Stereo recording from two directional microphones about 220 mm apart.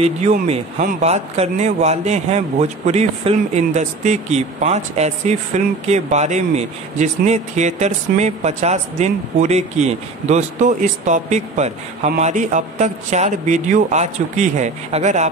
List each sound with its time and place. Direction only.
0.0 s a man's voice: 30° right (ahead or behind)